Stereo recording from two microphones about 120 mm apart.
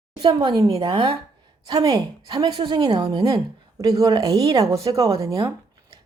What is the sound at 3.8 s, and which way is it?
Speech, 30° right (ahead or behind).